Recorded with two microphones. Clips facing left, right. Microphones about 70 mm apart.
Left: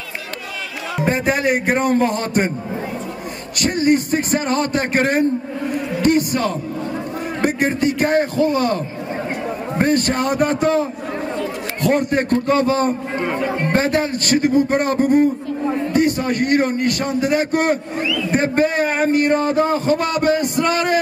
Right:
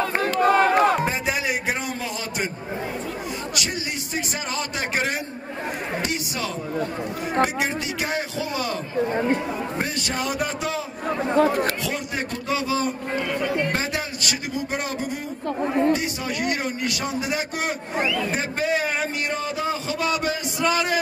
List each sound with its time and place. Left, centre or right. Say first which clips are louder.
0.4 s crowd: right 13 dB; right
1.0 s a man's voice: left 7 dB; left
3.6 s a man's voice: left 14 dB; left
9.8 s a man's voice: left 9 dB; left
13.2 s speech: left 2 dB; left
13.7 s a man's voice: left 9 dB; left